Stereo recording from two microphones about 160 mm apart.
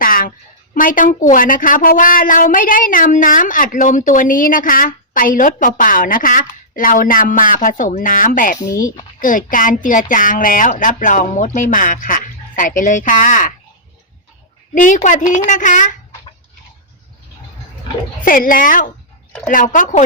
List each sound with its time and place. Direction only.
0.0 s a woman's voice: 60° left (ahead or behind)
14.9 s a woman's voice: 50° left (ahead or behind)
18.3 s a woman's voice: 60° left (ahead or behind)